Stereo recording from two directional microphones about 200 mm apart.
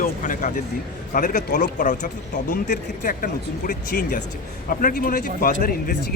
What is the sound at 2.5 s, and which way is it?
Speech, 45° left (ahead or behind).